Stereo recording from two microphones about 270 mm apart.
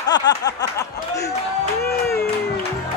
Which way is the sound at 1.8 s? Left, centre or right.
Left.